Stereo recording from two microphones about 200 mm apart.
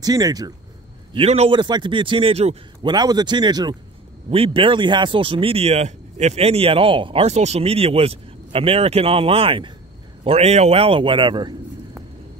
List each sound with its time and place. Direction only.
0.0 s speech: 20° right (ahead or behind)
1.1 s speech: 30° right (ahead or behind)